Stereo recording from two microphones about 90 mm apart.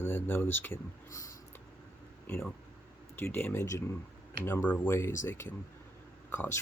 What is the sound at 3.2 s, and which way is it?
Speech, 20° left (ahead or behind).